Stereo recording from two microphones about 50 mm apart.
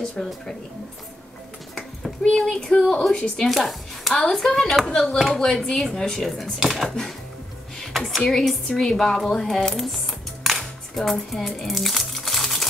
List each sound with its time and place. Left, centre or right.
0.2 s speech: centre
2.3 s speech: centre
3.4 s speech: centre
6.2 s speech: centre
7.8 s a sound: centre
8.2 s speech: centre